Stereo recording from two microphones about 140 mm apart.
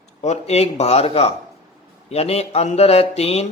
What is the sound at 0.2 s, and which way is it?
Speech, 50° left (ahead or behind).